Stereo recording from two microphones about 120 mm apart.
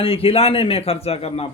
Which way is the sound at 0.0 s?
50° left (ahead or behind).